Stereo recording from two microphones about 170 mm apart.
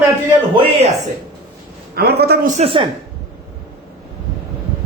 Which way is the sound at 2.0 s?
70° right (ahead or behind).